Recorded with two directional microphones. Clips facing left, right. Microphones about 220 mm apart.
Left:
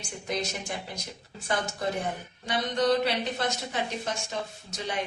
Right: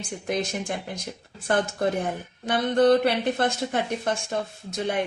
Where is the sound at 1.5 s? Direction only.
55° right (ahead or behind).